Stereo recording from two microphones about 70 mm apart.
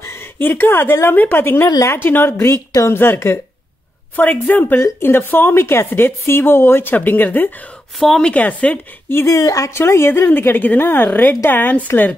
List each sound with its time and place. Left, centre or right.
0.0 s a sound: left
1.0 s a woman's voice: left
4.2 s a woman's voice: left
4.7 s a woman's voice: left
8.0 s speech: centre
8.3 s a woman's voice: left
9.1 s speech: left
9.8 s a woman's voice: left